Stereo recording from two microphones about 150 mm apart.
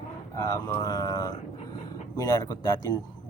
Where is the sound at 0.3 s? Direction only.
20° left (ahead or behind).